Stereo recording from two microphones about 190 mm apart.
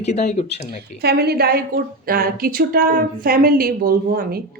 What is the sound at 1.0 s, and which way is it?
A woman's voice, 55° right (ahead or behind).